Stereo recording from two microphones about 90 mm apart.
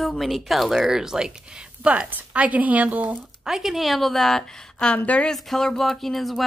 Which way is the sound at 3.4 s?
5° right (ahead or behind).